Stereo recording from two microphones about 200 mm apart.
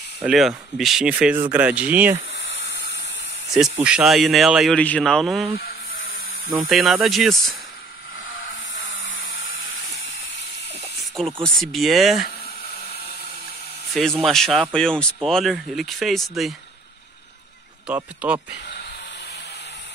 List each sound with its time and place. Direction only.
0.2 s speech: centre (ahead or behind)
2.3 s a sound: 60° left (ahead or behind)
3.8 s speech: 5° right (ahead or behind)
5.6 s a sound: 45° left (ahead or behind)
6.7 s speech: centre (ahead or behind)
8.8 s a sound: 75° left (ahead or behind)
11.4 s speech: centre (ahead or behind)
13.9 s speech: centre (ahead or behind)
17.8 s speech: 5° right (ahead or behind)